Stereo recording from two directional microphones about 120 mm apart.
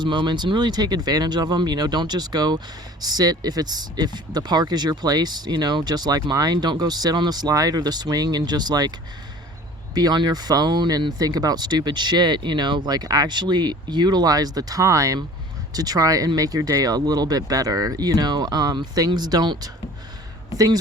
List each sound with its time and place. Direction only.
0.0 s speech: 40° right (ahead or behind)
9.9 s speech: 35° right (ahead or behind)